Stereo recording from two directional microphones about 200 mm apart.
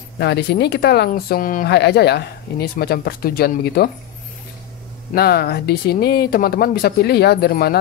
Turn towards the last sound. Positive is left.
turn(degrees=50)  # may be behind; listen again after turning